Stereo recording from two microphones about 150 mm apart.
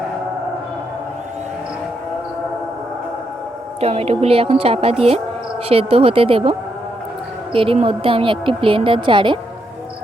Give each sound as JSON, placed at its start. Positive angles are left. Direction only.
{"t": 3.8, "sound": "a woman's voice", "side_deg": -40}